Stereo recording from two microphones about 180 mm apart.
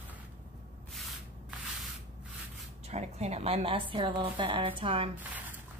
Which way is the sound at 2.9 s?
35° right (ahead or behind).